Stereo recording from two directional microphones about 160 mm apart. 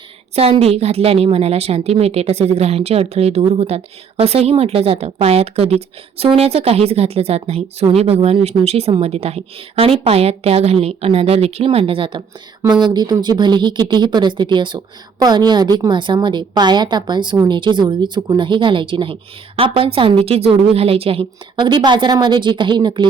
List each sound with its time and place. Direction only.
0.3 s speech: 35° right (ahead or behind)